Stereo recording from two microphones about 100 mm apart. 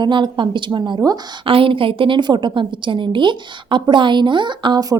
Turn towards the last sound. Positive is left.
turn(degrees=-45)  # may be behind; listen again after turning